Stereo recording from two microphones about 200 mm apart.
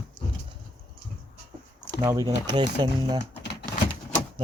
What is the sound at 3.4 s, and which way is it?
Typewriter, 55° left (ahead or behind).